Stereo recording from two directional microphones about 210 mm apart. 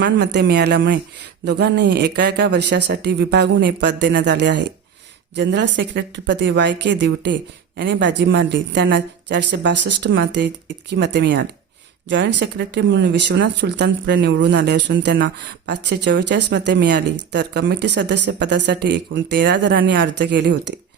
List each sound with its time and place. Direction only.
0.0 s speech: 50° right (ahead or behind)